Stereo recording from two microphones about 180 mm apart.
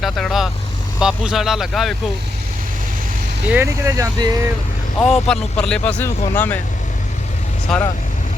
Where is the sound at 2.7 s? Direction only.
50° right (ahead or behind).